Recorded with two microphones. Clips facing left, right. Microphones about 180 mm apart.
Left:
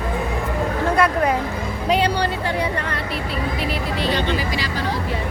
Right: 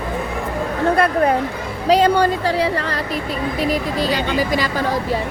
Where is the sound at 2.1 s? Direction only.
45° right (ahead or behind).